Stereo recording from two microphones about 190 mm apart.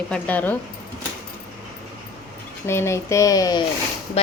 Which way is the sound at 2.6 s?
15° left (ahead or behind).